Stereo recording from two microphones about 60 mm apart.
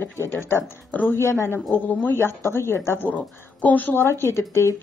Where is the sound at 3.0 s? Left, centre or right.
Left.